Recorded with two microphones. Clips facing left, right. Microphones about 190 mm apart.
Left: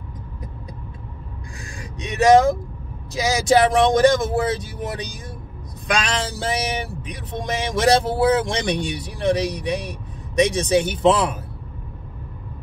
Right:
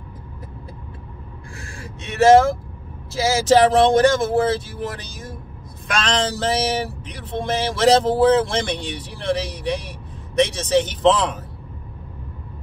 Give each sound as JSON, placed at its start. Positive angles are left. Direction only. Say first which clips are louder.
{"t": 1.6, "sound": "speech", "louder": "left 4 dB", "side_deg": 15}